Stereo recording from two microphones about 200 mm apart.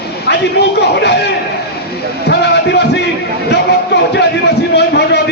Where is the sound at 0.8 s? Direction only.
60° left (ahead or behind).